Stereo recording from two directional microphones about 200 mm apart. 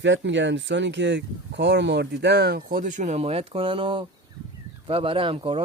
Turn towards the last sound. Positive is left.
turn(degrees=-25)  # may be behind; listen again after turning